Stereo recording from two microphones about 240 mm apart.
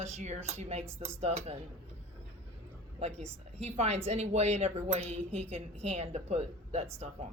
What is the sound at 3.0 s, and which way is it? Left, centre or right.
A woman's voice, right.